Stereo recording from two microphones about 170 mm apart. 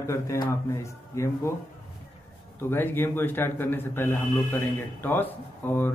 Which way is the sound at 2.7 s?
10° left (ahead or behind).